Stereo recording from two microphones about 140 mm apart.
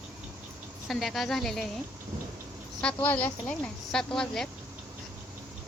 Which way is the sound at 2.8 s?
10° left (ahead or behind).